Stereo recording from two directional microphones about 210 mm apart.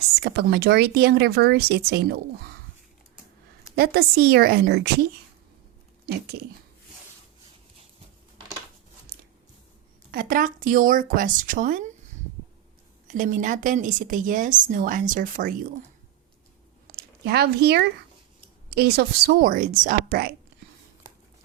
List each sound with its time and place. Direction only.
0.2 s speech: 50° right (ahead or behind)
3.8 s speech: 45° right (ahead or behind)
6.1 s speech: 50° right (ahead or behind)
10.1 s a woman's voice: 45° right (ahead or behind)
13.1 s a woman's voice: 40° right (ahead or behind)
16.8 s a sound: 50° right (ahead or behind)
18.7 s speech: 50° right (ahead or behind)